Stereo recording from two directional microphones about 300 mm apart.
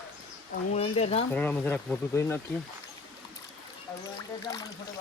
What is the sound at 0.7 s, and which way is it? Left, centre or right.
Speech, centre.